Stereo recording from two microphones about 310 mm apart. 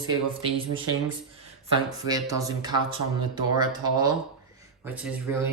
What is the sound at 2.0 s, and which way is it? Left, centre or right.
Speech, centre.